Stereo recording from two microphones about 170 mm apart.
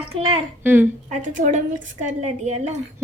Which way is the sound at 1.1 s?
50° right (ahead or behind).